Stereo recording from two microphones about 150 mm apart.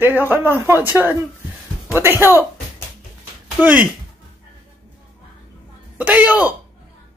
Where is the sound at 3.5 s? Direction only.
10° right (ahead or behind).